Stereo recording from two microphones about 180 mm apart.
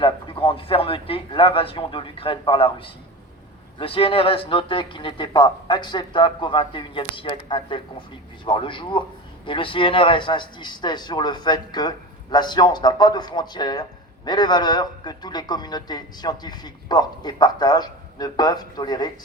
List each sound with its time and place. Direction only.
0.0 s a man's voice: 30° left (ahead or behind)